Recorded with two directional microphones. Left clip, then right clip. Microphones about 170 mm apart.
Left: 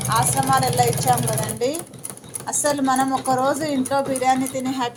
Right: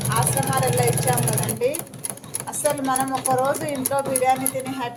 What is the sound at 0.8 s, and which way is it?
Speech, 20° left (ahead or behind).